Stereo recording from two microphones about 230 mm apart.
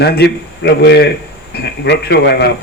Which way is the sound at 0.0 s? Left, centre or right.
Left.